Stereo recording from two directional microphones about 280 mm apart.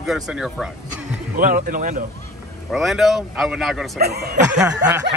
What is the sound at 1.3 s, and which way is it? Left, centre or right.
Speech, right.